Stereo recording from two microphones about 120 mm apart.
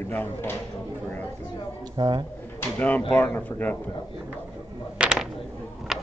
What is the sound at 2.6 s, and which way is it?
Speech, 15° left (ahead or behind).